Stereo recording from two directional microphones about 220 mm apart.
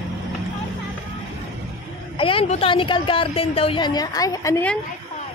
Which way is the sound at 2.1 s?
25° left (ahead or behind).